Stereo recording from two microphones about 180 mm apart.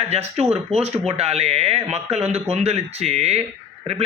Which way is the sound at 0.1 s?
35° right (ahead or behind).